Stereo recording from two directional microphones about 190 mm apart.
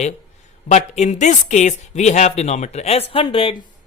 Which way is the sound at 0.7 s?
40° left (ahead or behind).